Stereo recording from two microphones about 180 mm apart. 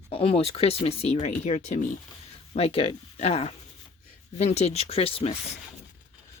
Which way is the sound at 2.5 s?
35° left (ahead or behind).